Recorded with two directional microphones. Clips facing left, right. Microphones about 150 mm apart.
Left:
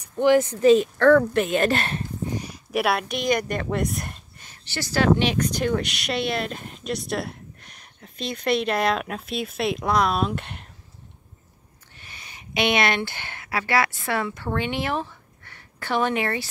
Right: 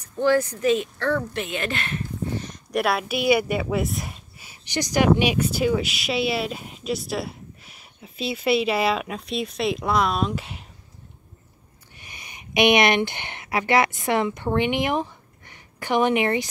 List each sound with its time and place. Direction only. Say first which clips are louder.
0.0 s speech: left 2 dB; 15° left (ahead or behind)
0.9 s speech: left 9 dB; 55° left (ahead or behind); by 2.0 s 35° left (ahead or behind)
2.3 s speech: even; 10° left (ahead or behind)
12.0 s speech: right 1 dB; 15° right (ahead or behind)